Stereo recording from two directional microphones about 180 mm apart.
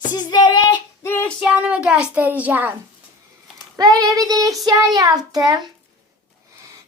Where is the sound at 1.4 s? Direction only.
5° right (ahead or behind).